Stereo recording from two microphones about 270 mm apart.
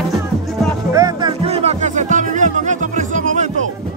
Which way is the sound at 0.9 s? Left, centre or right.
Centre.